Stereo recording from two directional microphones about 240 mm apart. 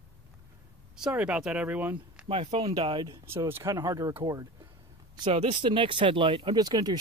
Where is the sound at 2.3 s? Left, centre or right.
Right.